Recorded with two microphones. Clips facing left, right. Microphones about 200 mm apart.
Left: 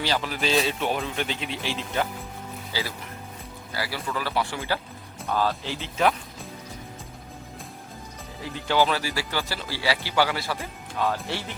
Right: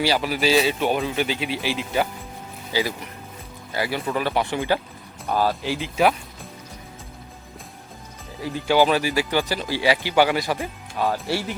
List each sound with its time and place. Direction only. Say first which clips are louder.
0.0 s speech: right 5 dB; 10° right (ahead or behind)
8.6 s speech: right 5 dB; 15° right (ahead or behind)